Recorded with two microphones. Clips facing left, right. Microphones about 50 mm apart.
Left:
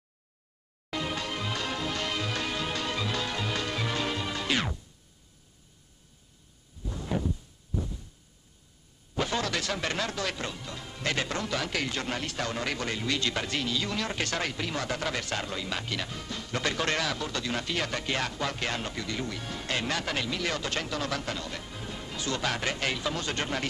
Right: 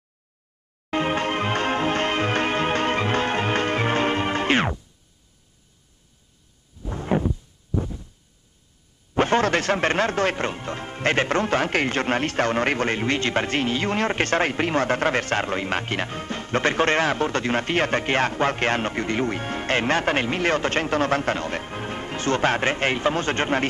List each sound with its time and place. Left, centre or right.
0.8 s music: right
6.8 s heart sounds: right
9.1 s speech: right